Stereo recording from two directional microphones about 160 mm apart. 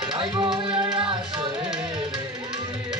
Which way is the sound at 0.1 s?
30° right (ahead or behind).